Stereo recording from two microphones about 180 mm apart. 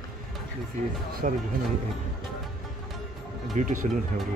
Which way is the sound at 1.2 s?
50° right (ahead or behind).